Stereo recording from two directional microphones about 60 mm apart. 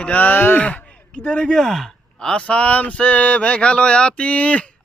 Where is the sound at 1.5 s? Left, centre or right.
Centre.